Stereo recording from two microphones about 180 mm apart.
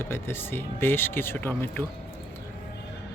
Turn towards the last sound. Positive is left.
turn(degrees=10)  # may be behind; listen again after turning